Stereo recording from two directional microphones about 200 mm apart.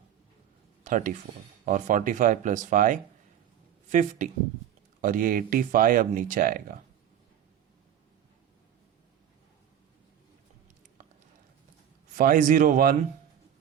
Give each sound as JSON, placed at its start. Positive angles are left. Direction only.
{"t": 0.9, "sound": "speech", "side_deg": -40}
{"t": 4.9, "sound": "speech", "side_deg": -45}
{"t": 12.1, "sound": "speech", "side_deg": -45}